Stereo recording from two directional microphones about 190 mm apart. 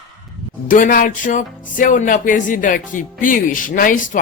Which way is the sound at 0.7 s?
45° left (ahead or behind).